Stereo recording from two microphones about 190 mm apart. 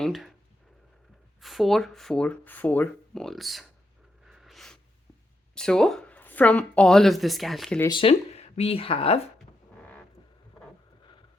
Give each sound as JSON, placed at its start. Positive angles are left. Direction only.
{"t": 0.0, "sound": "speech", "side_deg": 0}
{"t": 1.4, "sound": "speech", "side_deg": 0}
{"t": 4.3, "sound": "a sound", "side_deg": 0}
{"t": 5.5, "sound": "speech", "side_deg": 5}
{"t": 7.9, "sound": "speech", "side_deg": 25}